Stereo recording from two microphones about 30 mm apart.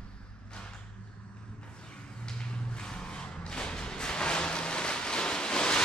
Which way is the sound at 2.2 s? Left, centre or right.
Left.